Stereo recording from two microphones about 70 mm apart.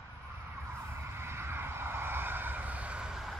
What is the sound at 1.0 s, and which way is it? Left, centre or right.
Vehicle, right.